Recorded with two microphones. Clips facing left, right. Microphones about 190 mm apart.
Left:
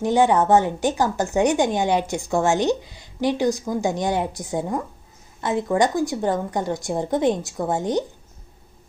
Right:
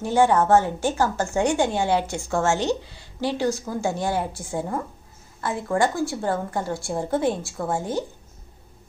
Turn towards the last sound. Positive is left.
turn(degrees=20)  # may be behind; listen again after turning